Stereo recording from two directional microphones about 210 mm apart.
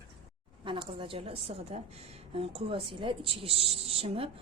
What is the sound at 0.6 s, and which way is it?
A woman's voice, 25° right (ahead or behind).